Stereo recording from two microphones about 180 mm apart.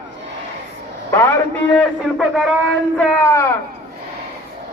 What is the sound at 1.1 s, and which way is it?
Music, 15° left (ahead or behind).